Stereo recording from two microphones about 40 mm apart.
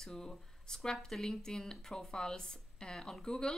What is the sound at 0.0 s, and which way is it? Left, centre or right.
Speech, centre.